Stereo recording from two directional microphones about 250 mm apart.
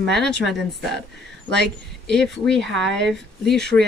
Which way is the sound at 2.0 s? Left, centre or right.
Centre.